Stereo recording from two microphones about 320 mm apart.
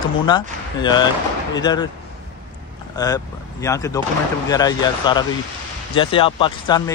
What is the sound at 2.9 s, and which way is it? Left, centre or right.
Speech, centre.